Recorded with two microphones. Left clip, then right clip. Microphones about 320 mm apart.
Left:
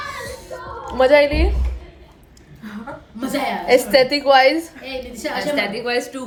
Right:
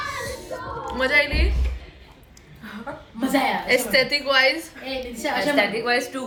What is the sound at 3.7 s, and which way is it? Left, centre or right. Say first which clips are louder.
Speech: left 8 dB; left.